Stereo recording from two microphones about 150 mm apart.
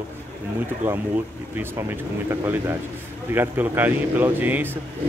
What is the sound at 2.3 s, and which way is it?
A man's voice, 15° right (ahead or behind).